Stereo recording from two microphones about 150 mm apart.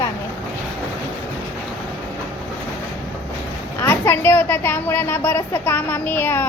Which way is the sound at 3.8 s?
15° left (ahead or behind).